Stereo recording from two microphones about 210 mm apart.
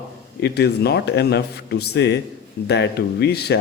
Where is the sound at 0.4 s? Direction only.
50° left (ahead or behind).